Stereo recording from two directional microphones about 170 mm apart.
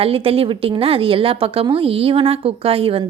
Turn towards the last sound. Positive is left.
turn(degrees=-35)  # may be behind; listen again after turning